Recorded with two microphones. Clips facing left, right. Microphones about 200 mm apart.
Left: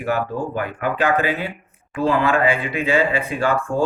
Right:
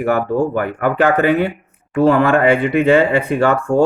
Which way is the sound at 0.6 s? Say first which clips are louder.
Right 6 dB; 55° right (ahead or behind).